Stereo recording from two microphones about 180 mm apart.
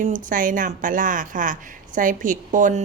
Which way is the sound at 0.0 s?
45° right (ahead or behind).